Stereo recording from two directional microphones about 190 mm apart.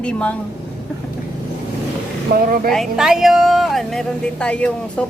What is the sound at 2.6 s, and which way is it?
Speech, centre (ahead or behind).